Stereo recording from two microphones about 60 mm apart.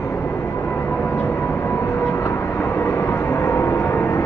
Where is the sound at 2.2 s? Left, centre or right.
Left.